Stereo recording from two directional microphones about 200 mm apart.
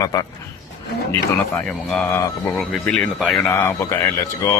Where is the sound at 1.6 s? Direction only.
5° left (ahead or behind).